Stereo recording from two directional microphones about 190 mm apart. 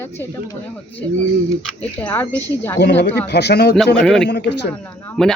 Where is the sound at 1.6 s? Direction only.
10° left (ahead or behind).